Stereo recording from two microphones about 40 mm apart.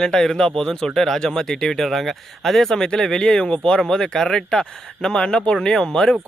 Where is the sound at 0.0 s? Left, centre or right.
Centre.